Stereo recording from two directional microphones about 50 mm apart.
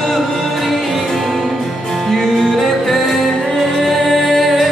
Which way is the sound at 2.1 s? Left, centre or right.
Centre.